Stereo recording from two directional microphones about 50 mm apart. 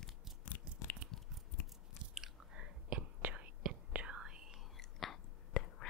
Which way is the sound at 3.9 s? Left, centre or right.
Centre.